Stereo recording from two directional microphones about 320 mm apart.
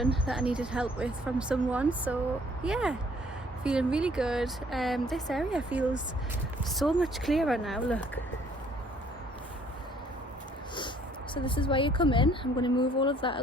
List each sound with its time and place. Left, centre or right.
0.3 s speech: centre
11.3 s speech: centre